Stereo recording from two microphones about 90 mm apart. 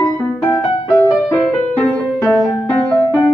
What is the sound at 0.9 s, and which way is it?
Music, 30° left (ahead or behind).